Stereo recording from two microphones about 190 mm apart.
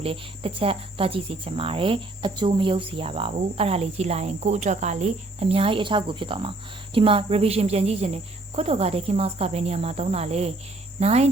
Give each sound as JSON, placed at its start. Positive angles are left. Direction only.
{"t": 0.0, "sound": "cricket", "side_deg": -30}